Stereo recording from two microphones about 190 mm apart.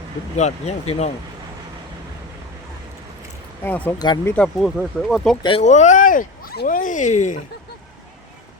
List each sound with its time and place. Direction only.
0.3 s speech: 35° left (ahead or behind)
3.6 s speech: 10° left (ahead or behind)
3.9 s speech: 20° left (ahead or behind)
4.4 s speech: 5° left (ahead or behind)
5.4 s speech: 30° left (ahead or behind)